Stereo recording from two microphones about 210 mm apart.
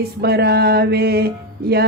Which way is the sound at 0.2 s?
50° right (ahead or behind).